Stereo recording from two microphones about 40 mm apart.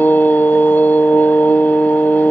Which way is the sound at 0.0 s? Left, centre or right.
Left.